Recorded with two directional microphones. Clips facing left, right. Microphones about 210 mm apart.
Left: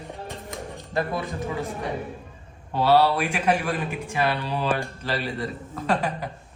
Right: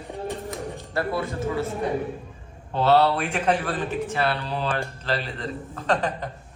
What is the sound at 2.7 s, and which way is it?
Speech, 10° left (ahead or behind).